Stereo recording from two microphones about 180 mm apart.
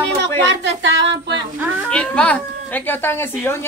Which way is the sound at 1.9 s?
5° left (ahead or behind).